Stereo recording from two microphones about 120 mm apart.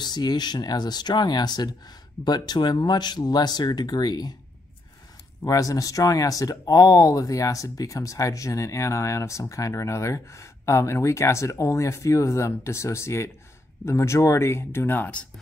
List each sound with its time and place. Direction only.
0.0 s speech: 35° left (ahead or behind)
5.4 s speech: 25° left (ahead or behind)